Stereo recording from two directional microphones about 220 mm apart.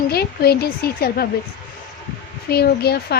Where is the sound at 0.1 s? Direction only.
45° left (ahead or behind).